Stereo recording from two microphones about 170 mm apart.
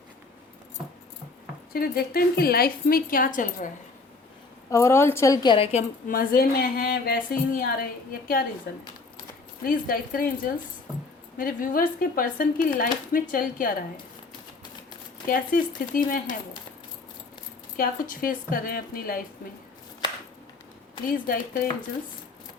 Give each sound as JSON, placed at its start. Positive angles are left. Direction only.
{"t": 1.7, "sound": "speech", "side_deg": 60}
{"t": 4.7, "sound": "a woman's voice", "side_deg": 15}
{"t": 6.1, "sound": "speech", "side_deg": 60}
{"t": 9.6, "sound": "speech", "side_deg": 55}
{"t": 15.3, "sound": "speech", "side_deg": 55}
{"t": 17.7, "sound": "speech", "side_deg": 55}
{"t": 21.1, "sound": "speech", "side_deg": 55}